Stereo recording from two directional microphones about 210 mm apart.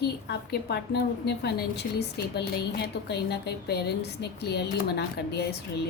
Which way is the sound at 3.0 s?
50° left (ahead or behind).